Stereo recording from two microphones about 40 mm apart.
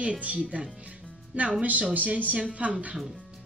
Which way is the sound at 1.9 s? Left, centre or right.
Right.